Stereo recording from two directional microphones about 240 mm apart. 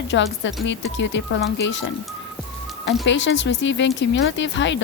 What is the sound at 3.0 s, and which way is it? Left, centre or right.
Speech, left.